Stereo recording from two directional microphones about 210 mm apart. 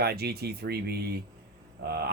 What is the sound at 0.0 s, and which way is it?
A man's voice, 50° right (ahead or behind).